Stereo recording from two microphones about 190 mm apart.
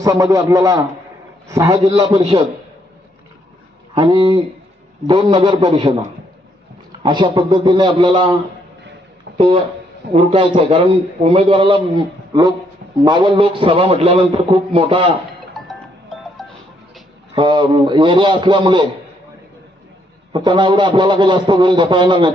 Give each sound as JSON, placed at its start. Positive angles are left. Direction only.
{"t": 0.0, "sound": "a man's voice", "side_deg": -15}
{"t": 1.8, "sound": "a man's voice", "side_deg": -30}
{"t": 3.9, "sound": "a man's voice", "side_deg": -25}
{"t": 7.0, "sound": "a man's voice", "side_deg": -25}
{"t": 10.2, "sound": "a man's voice", "side_deg": -25}
{"t": 15.6, "sound": "music", "side_deg": 0}
{"t": 17.3, "sound": "a man's voice", "side_deg": -25}
{"t": 20.3, "sound": "a man's voice", "side_deg": -25}